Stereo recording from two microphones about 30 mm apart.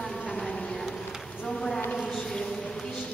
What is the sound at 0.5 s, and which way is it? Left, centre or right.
Insect, left.